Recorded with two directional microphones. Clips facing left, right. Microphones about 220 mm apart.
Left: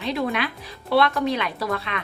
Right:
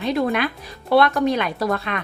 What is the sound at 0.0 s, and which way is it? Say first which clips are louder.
Speech: right 4 dB; 50° right (ahead or behind).